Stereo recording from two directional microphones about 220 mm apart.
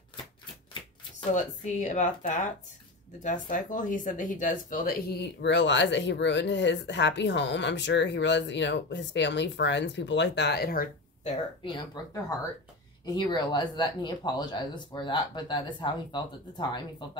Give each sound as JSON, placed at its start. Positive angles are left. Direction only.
{"t": 1.3, "sound": "speech", "side_deg": 35}
{"t": 11.6, "sound": "speech", "side_deg": 20}